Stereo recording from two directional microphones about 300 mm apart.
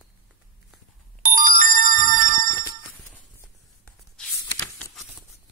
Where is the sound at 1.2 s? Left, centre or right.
Right.